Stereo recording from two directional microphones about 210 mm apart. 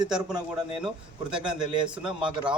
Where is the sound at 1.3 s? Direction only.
5° right (ahead or behind).